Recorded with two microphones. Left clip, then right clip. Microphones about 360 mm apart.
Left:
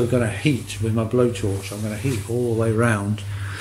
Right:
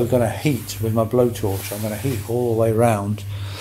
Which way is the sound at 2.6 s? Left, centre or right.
Centre.